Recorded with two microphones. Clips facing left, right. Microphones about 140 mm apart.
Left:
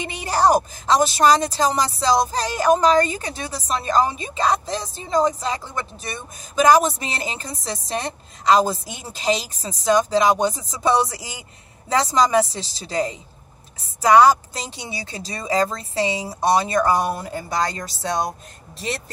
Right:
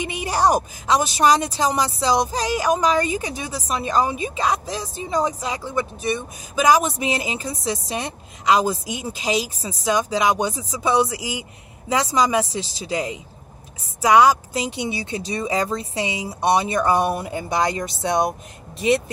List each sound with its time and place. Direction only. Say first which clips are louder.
0.0 s speech: left 1 dB; 15° right (ahead or behind)